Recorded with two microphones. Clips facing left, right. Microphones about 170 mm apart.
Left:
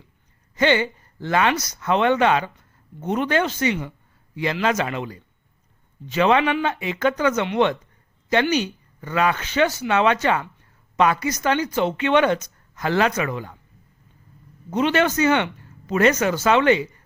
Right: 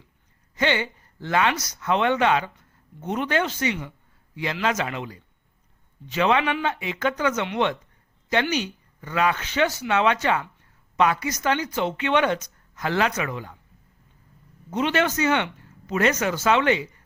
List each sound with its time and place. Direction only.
0.5 s speech: 40° left (ahead or behind)
14.7 s speech: 45° left (ahead or behind)